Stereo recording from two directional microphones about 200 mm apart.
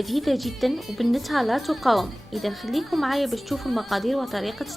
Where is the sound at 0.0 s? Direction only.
Centre (ahead or behind).